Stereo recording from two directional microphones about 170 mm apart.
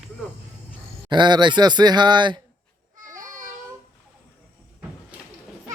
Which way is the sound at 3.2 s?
50° right (ahead or behind).